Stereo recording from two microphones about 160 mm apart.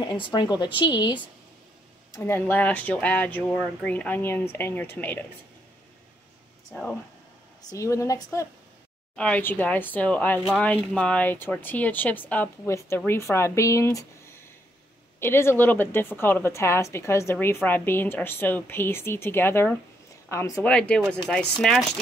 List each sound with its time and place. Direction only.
0.0 s a woman's voice: 30° left (ahead or behind)
2.1 s speech: 15° left (ahead or behind)
6.7 s speech: 5° left (ahead or behind)
7.7 s a woman's voice: 20° left (ahead or behind)
9.1 s a woman's voice: 5° left (ahead or behind)
20.6 s speech: 5° left (ahead or behind)